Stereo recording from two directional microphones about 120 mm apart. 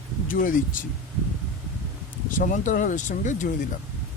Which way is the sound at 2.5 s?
90° left.